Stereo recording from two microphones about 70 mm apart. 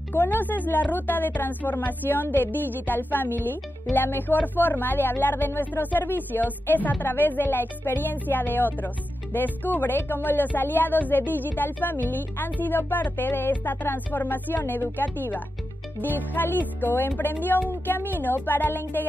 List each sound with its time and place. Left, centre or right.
0.1 s speech: left